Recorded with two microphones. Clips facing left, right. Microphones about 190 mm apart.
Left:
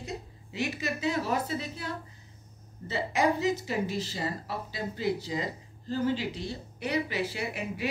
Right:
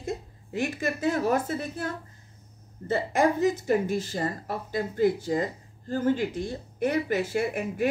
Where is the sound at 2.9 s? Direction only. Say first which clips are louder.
Right 4 dB; 50° right (ahead or behind).